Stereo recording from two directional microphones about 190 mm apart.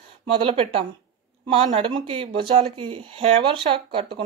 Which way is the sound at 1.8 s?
30° right (ahead or behind).